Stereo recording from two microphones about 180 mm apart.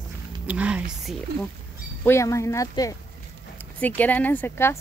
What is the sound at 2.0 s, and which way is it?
Speech, 15° left (ahead or behind).